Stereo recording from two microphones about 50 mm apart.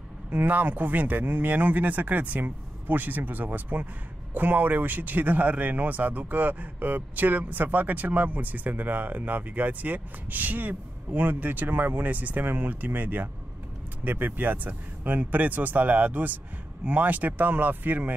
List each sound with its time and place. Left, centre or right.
0.3 s speech: right